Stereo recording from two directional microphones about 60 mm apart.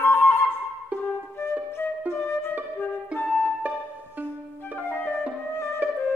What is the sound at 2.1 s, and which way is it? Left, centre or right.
Music, left.